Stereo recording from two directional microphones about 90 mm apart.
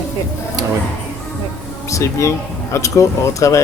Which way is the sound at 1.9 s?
35° left (ahead or behind).